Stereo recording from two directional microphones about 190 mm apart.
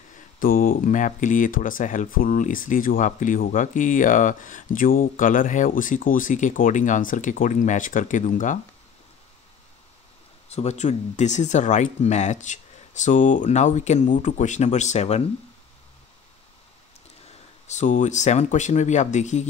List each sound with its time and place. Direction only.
0.4 s speech: 50° left (ahead or behind)
10.5 s speech: 35° left (ahead or behind)
17.3 s speech: 40° left (ahead or behind)